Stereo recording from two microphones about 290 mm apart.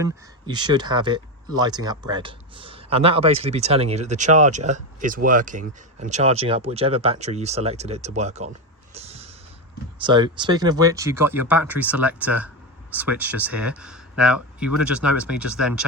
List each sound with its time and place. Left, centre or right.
0.0 s speech: centre
8.9 s a sound: right
10.0 s speech: centre